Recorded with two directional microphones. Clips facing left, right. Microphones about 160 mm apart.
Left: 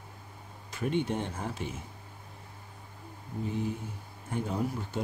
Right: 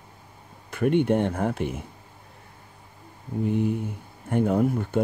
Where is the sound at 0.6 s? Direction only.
60° right (ahead or behind).